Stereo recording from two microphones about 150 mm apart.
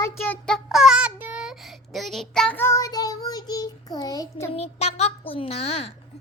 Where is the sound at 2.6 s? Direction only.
20° left (ahead or behind).